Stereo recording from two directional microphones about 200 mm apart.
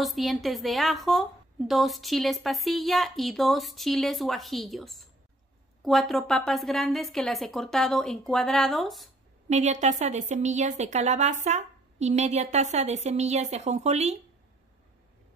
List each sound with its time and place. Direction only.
0.0 s a woman's voice: centre (ahead or behind)
9.5 s a woman's voice: 35° right (ahead or behind)